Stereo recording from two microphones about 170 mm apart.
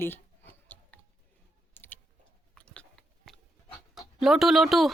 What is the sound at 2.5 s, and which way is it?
Biting, 5° left (ahead or behind).